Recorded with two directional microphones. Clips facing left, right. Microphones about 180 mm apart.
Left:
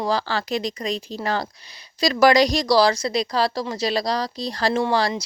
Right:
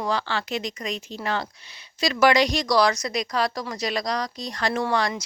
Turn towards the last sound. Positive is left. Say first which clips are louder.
# left 3 dB
turn(degrees=30)  # may be behind; listen again after turning